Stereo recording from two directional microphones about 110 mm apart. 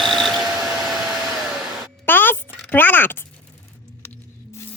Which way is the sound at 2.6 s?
15° left (ahead or behind).